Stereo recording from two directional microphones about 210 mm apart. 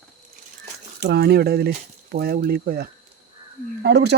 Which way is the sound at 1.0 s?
50° right (ahead or behind).